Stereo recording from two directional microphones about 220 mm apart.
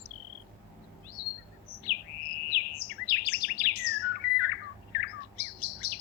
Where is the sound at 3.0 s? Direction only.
45° left (ahead or behind).